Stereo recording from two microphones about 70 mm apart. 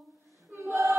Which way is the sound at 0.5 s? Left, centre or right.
Right.